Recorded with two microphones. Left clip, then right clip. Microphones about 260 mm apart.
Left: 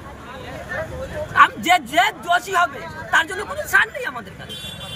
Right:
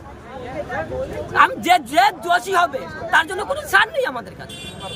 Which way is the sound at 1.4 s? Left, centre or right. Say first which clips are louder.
Even; centre.